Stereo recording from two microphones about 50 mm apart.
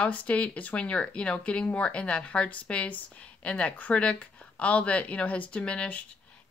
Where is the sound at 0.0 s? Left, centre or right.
Left.